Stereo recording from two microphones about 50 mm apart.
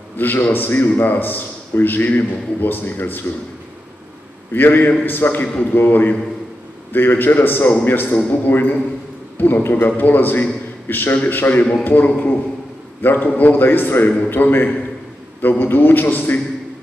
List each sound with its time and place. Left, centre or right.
0.2 s a man's voice: left
4.5 s a man's voice: left